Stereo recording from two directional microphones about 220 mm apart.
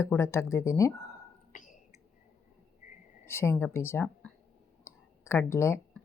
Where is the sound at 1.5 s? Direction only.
35° left (ahead or behind).